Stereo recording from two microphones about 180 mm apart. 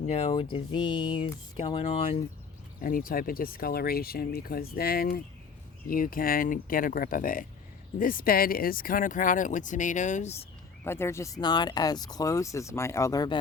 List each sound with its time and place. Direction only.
0.1 s speech: 35° left (ahead or behind)
2.8 s speech: 50° left (ahead or behind)
10.8 s speech: 15° left (ahead or behind)